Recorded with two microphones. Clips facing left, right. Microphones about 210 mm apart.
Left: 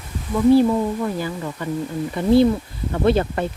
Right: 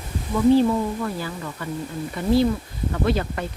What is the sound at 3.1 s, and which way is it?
Speech, 30° left (ahead or behind).